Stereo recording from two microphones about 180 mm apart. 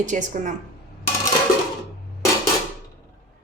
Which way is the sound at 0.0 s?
45° right (ahead or behind).